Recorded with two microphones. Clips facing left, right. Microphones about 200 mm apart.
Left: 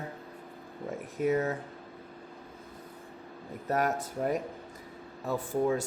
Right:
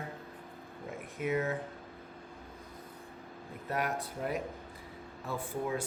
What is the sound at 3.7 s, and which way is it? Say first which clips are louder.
Speech: left 5 dB; 40° left (ahead or behind).